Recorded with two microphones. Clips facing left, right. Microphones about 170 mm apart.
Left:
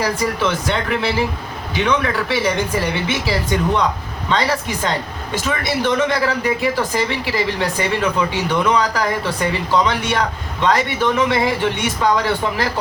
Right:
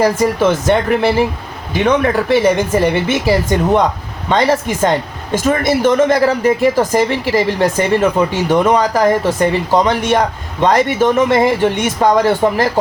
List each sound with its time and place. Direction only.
0.0 s speech: 45° right (ahead or behind)